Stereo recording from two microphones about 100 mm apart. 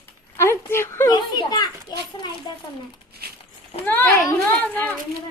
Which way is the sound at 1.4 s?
45° left (ahead or behind).